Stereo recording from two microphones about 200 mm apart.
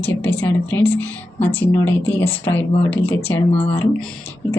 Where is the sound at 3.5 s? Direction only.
30° left (ahead or behind).